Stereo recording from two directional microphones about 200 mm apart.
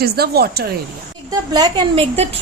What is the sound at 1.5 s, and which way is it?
Speech, 20° right (ahead or behind).